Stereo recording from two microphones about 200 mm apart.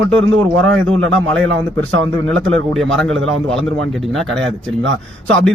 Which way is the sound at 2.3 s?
5° left (ahead or behind).